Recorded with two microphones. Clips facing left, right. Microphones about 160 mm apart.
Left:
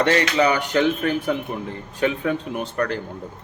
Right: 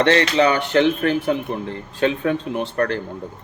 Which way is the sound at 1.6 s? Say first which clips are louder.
Right 2 dB; 15° left (ahead or behind).